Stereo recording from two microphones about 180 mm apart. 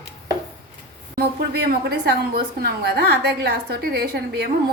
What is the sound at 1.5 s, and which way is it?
A woman's voice, 60° right (ahead or behind).